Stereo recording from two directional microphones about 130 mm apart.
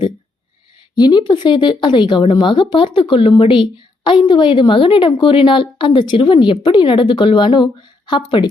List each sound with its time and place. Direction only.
0.9 s speech: 35° left (ahead or behind)